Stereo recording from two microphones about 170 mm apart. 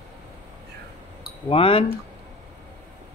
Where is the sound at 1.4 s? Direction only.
35° left (ahead or behind).